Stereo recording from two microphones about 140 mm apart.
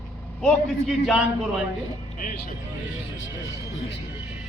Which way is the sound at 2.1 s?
75° left (ahead or behind).